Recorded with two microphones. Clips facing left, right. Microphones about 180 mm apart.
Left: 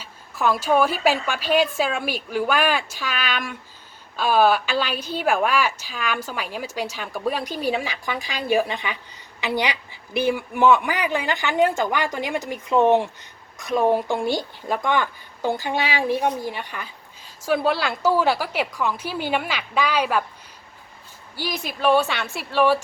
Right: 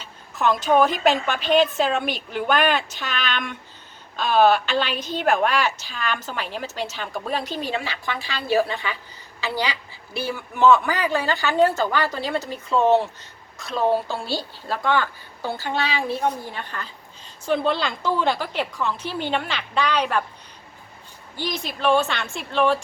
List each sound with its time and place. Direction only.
0.0 s a woman's voice: 5° left (ahead or behind)
21.3 s a woman's voice: 5° left (ahead or behind)